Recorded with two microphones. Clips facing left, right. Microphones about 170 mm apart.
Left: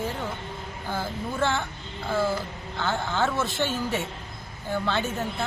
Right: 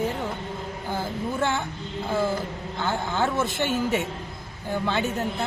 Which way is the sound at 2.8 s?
15° right (ahead or behind).